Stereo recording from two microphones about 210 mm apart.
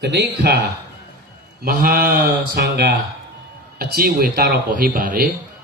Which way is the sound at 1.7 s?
45° right (ahead or behind).